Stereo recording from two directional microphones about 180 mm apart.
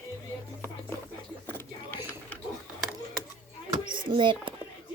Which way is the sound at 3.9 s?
25° right (ahead or behind).